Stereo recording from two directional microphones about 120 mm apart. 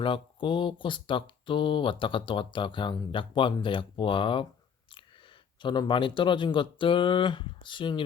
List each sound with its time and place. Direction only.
0.0 s speech: 45° left (ahead or behind)
5.6 s speech: 40° left (ahead or behind)